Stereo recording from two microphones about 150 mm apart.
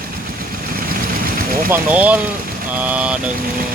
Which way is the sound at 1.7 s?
10° right (ahead or behind).